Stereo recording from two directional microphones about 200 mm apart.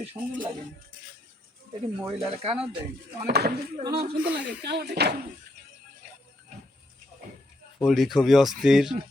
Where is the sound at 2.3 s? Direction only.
30° right (ahead or behind).